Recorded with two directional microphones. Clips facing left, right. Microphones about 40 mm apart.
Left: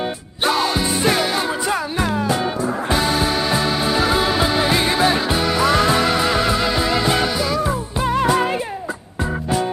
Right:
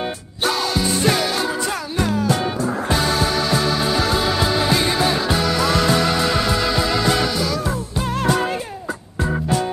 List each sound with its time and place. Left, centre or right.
0.5 s music: centre
4.0 s music: centre